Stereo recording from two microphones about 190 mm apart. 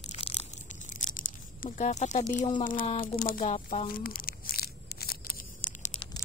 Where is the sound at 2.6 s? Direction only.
45° left (ahead or behind).